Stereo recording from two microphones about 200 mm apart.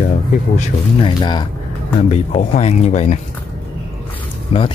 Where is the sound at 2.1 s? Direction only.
35° left (ahead or behind).